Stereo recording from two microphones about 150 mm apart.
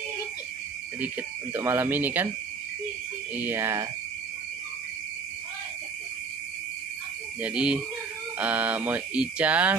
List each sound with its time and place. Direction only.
1.0 s speech: 15° right (ahead or behind)
3.3 s speech: 15° right (ahead or behind)
7.4 s speech: 5° right (ahead or behind)